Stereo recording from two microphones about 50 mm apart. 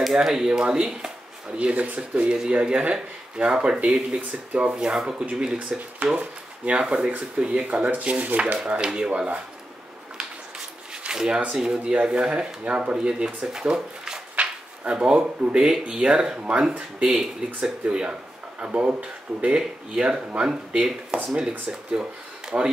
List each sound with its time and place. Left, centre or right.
0.0 s speech: centre
1.6 s speech: right
4.5 s speech: right
4.7 s speech: centre
11.1 s speech: centre
12.6 s speech: right
14.3 s a sound: right
15.5 s speech: centre